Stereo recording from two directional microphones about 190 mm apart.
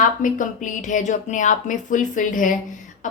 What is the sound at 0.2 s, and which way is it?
A woman's voice, 45° left (ahead or behind).